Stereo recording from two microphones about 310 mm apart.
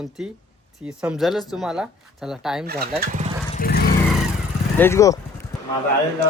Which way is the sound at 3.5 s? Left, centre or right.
Left.